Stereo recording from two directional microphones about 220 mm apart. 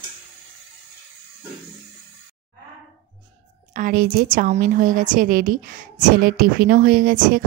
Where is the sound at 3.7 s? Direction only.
40° right (ahead or behind).